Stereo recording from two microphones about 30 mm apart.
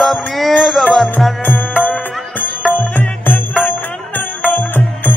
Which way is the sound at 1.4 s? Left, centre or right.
Left.